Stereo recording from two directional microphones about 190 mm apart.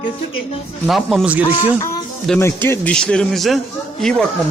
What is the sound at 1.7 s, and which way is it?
Speech, 15° left (ahead or behind).